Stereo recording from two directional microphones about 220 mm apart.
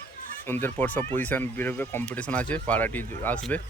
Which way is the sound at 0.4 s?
10° left (ahead or behind).